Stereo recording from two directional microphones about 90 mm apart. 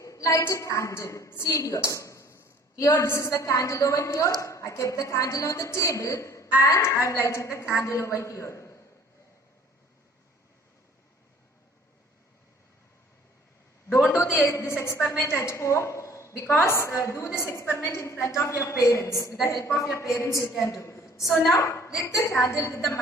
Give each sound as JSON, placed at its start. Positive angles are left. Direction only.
{"t": 0.0, "sound": "a woman's voice", "side_deg": 35}
{"t": 14.6, "sound": "a woman's voice", "side_deg": 25}